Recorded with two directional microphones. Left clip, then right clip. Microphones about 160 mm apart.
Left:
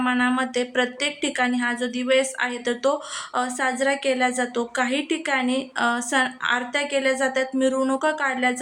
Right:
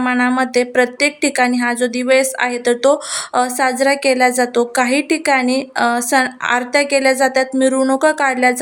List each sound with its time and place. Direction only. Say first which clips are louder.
0.0 s a woman's voice: right 6 dB; 40° right (ahead or behind)